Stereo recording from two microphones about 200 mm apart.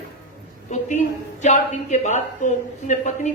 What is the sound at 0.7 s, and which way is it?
A woman's voice, 35° left (ahead or behind).